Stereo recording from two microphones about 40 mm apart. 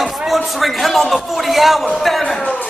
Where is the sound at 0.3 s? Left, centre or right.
Centre.